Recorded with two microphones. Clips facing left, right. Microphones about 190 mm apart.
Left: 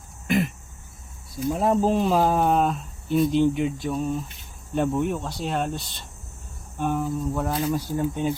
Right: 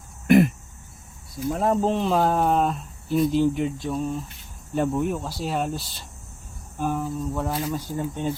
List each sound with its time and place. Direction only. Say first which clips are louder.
0.3 s a sound: right 7 dB; 55° right (ahead or behind)
1.5 s speech: left 1 dB; 5° left (ahead or behind)
7.7 s speech: left 3 dB; 10° left (ahead or behind)